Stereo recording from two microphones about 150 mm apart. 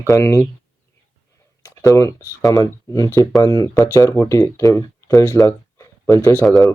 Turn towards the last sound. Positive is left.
turn(degrees=0)  # may be behind; listen again after turning